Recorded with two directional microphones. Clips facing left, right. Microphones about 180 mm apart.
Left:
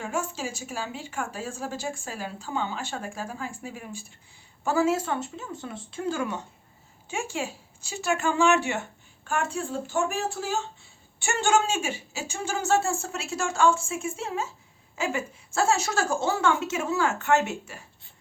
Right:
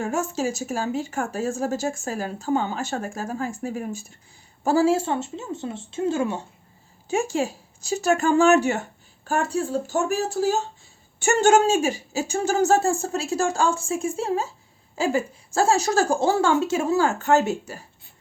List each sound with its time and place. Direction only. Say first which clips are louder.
0.0 s a woman's voice: right 6 dB; 40° right (ahead or behind)
4.6 s speech: right 5 dB; 35° right (ahead or behind)
7.1 s speech: right 8 dB; 40° right (ahead or behind)